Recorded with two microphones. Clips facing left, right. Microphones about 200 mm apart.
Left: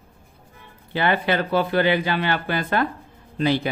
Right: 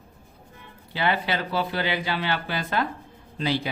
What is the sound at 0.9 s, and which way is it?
Speech, 55° left (ahead or behind).